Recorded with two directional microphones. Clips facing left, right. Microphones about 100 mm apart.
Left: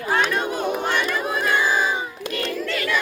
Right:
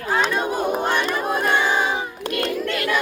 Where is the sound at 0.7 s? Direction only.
45° right (ahead or behind).